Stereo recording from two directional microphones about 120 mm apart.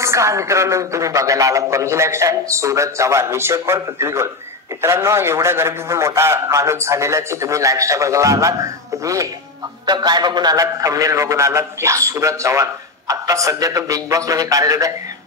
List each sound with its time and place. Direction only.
0.0 s a man's voice: 25° right (ahead or behind)